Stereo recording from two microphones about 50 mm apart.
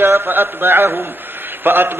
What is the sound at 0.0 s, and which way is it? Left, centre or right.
Mantra, right.